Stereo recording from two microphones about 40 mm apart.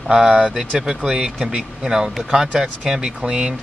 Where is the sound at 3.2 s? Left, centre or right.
Right.